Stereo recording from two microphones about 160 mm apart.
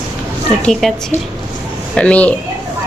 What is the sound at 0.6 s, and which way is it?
Speech, centre (ahead or behind).